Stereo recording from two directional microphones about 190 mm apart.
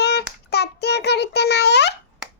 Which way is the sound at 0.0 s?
60° left (ahead or behind).